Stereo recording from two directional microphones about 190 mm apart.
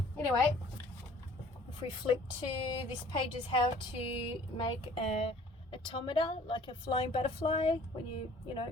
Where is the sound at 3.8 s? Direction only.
25° left (ahead or behind).